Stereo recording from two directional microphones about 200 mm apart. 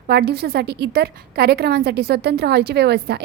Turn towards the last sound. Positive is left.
turn(degrees=-55)  # may be behind; listen again after turning